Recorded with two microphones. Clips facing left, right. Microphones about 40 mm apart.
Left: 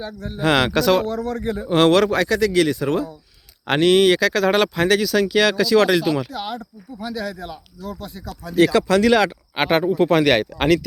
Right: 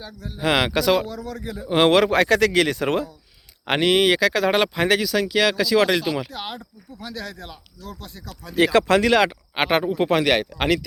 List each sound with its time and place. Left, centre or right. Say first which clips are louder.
0.0 s speech: left 6 dB; left
0.3 s speech: left 2 dB; centre
1.0 s speech: left 8 dB; left
1.9 s speech: even; right
3.7 s speech: left 3 dB; centre
7.0 s speech: left 6 dB; centre
9.0 s speech: left 2 dB; centre
10.2 s speech: left 3 dB; centre